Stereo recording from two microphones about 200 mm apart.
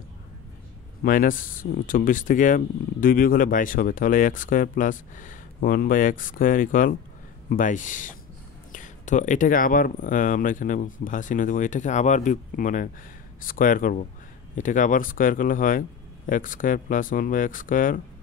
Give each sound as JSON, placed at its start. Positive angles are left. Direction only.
{"t": 1.0, "sound": "speech", "side_deg": 45}